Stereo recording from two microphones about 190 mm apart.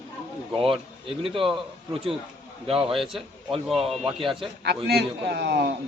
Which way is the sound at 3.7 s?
Centre (ahead or behind).